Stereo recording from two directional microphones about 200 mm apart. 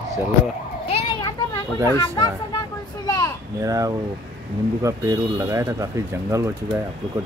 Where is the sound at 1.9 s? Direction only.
20° left (ahead or behind).